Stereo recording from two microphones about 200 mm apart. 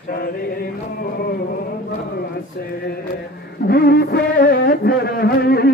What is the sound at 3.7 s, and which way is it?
Music, 50° left (ahead or behind).